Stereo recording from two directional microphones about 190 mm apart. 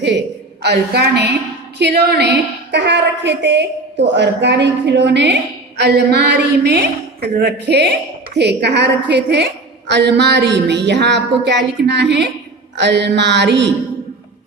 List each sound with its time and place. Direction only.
0.6 s a woman's voice: 60° right (ahead or behind)